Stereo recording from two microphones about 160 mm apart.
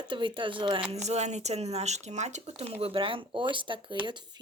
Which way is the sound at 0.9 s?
45° right (ahead or behind).